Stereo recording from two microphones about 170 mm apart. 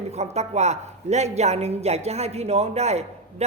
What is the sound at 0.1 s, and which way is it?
Speech, 40° right (ahead or behind).